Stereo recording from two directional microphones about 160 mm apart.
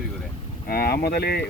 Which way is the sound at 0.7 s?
70° left (ahead or behind).